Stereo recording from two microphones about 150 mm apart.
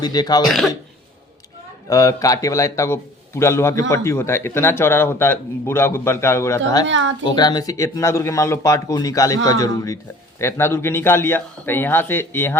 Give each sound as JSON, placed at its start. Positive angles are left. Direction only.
{"t": 0.0, "sound": "speech", "side_deg": 25}
{"t": 0.4, "sound": "speech", "side_deg": 0}
{"t": 1.9, "sound": "a man's voice", "side_deg": 20}